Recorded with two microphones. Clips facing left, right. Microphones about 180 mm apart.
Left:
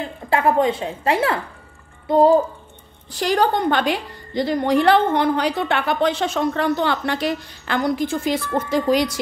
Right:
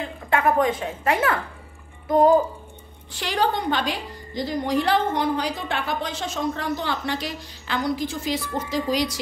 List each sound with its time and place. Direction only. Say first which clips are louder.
0.3 s a woman's voice: left 3 dB; 30° left (ahead or behind)
3.1 s a woman's voice: left 5 dB; 40° left (ahead or behind)